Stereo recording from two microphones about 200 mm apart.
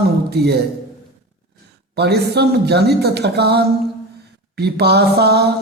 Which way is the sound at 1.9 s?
55° right (ahead or behind).